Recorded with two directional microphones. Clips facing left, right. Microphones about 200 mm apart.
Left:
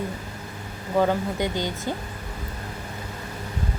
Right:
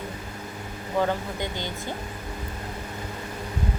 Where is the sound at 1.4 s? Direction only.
15° left (ahead or behind).